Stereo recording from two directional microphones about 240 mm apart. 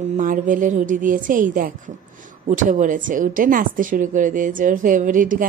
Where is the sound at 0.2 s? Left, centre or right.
Right.